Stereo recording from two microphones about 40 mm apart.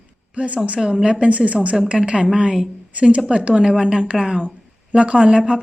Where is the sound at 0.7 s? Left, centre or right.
Right.